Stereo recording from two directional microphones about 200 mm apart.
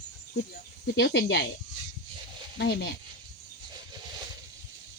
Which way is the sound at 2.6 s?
55° left (ahead or behind).